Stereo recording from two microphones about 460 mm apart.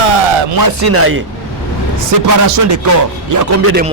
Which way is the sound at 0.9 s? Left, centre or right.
Right.